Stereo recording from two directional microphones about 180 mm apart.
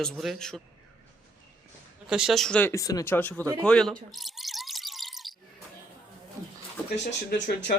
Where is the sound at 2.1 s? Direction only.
Centre (ahead or behind).